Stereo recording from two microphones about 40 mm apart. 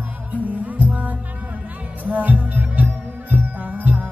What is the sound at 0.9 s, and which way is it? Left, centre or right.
Music, right.